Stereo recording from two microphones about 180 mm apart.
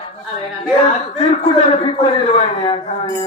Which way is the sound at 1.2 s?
35° left (ahead or behind).